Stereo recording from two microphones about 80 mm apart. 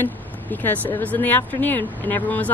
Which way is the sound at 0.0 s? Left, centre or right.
Left.